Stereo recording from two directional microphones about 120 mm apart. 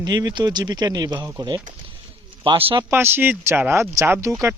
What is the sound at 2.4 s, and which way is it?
Speech, 45° right (ahead or behind).